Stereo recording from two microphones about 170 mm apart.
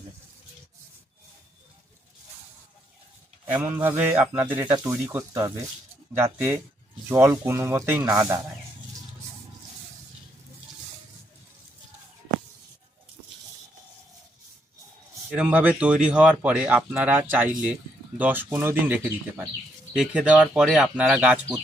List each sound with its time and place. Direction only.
3.5 s speech: 10° right (ahead or behind)
15.3 s speech: 10° right (ahead or behind)